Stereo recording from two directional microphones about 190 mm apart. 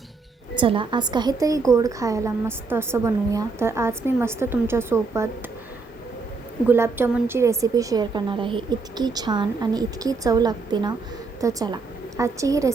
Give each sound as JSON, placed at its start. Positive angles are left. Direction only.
{"t": 0.5, "sound": "a woman's voice", "side_deg": -25}
{"t": 6.7, "sound": "a woman's voice", "side_deg": -10}